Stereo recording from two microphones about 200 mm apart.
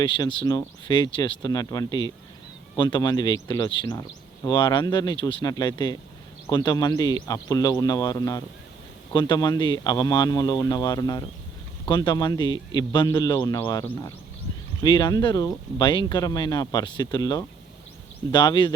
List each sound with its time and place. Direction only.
0.0 s speech: 20° left (ahead or behind)